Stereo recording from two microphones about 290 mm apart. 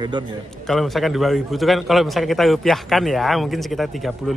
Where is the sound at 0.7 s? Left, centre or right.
Centre.